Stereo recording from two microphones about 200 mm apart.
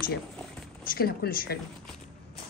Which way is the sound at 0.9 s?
50° left (ahead or behind).